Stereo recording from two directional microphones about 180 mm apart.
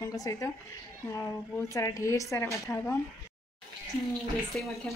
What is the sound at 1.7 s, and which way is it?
Speech, 15° left (ahead or behind).